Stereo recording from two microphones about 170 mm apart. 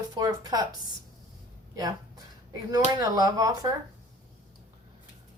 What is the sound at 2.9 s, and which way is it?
Speech, 20° right (ahead or behind).